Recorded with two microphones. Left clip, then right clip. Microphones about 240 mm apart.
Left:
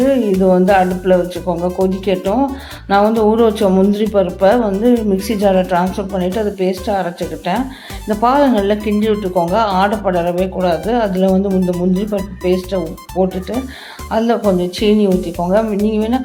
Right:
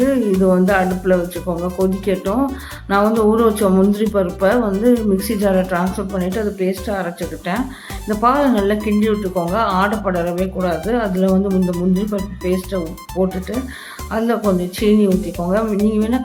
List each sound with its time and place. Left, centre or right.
0.0 s music: centre
0.8 s speech: centre